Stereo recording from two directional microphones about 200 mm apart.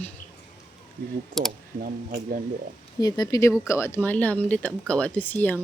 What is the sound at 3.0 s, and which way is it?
Speech, 20° left (ahead or behind).